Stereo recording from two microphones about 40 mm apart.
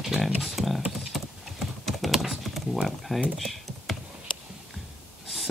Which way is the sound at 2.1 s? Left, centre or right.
Centre.